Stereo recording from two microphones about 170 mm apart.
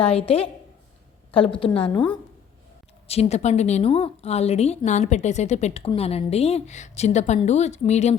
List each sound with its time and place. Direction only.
0.0 s a woman's voice: 35° left (ahead or behind)
3.1 s a woman's voice: 40° left (ahead or behind)